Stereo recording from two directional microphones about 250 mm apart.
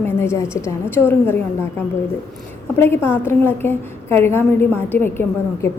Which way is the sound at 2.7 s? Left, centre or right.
Centre.